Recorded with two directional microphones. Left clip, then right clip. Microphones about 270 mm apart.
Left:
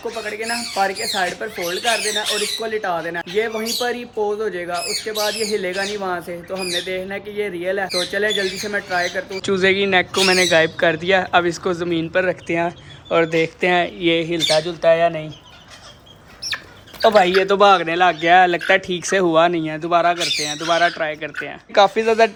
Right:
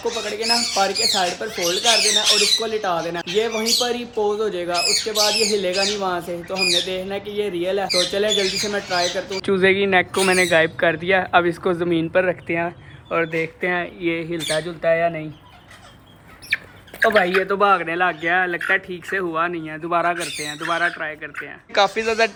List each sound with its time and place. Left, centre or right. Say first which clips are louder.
0.3 s speech: right 5 dB; centre
9.4 s speech: even; centre
17.0 s speech: left 3 dB; centre
21.8 s speech: left 4 dB; centre